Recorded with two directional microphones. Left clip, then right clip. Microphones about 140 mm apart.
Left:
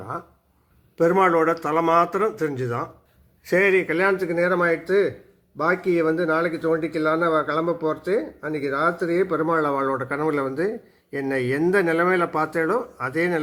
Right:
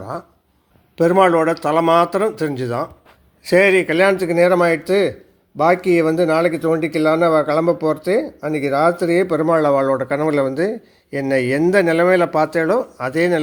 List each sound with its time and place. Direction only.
0.9 s a man's voice: 30° right (ahead or behind)